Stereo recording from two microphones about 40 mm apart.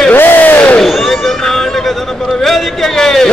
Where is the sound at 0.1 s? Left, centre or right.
Left.